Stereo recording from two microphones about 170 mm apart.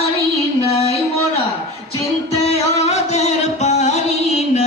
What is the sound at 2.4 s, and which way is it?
Music, 40° left (ahead or behind).